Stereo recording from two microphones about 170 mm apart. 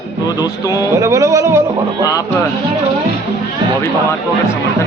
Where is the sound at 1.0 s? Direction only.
20° right (ahead or behind).